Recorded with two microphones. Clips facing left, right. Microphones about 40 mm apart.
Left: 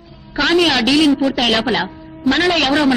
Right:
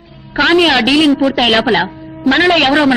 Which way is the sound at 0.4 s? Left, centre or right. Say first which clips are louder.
Right 4 dB; right.